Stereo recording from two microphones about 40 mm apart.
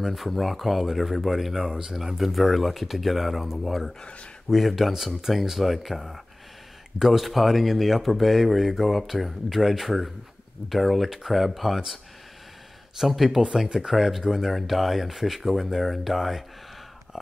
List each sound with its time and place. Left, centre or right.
0.0 s speech: centre